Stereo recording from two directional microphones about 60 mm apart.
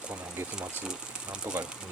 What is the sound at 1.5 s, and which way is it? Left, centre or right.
Speech, right.